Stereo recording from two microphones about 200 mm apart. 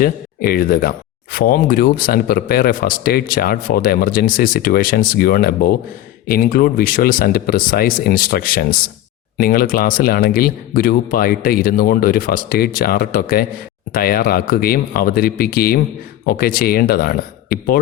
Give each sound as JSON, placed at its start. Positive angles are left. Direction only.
{"t": 0.0, "sound": "speech", "side_deg": 50}